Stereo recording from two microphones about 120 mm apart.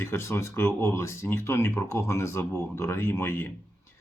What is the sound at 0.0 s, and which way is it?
Speech, 20° left (ahead or behind).